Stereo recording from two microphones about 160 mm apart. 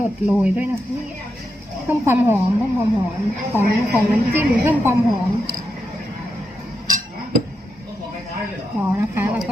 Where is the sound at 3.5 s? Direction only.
10° right (ahead or behind).